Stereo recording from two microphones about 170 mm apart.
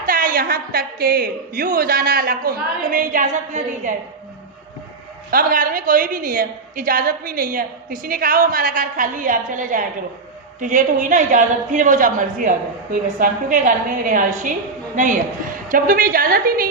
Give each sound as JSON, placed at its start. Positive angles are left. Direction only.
{"t": 0.0, "sound": "a woman's voice", "side_deg": -55}
{"t": 5.3, "sound": "a woman's voice", "side_deg": -60}